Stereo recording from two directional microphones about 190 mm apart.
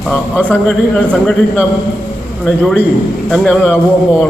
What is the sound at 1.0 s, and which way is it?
Speech, 5° left (ahead or behind).